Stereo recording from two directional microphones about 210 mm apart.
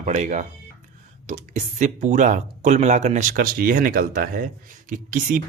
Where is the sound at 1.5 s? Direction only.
35° right (ahead or behind).